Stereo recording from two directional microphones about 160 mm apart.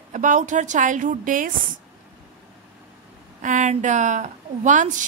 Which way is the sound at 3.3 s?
50° right (ahead or behind).